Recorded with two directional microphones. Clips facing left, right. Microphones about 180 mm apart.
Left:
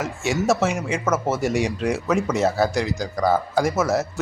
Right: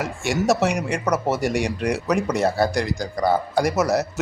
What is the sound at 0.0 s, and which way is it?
Speech, 60° right (ahead or behind).